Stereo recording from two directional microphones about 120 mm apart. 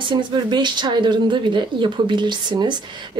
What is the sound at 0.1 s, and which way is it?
Speech, 40° right (ahead or behind).